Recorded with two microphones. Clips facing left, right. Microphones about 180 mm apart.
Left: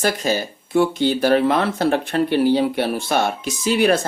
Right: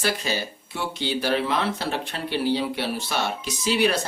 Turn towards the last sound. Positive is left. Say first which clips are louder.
# left 5 dB
turn(degrees=50)  # may be behind; listen again after turning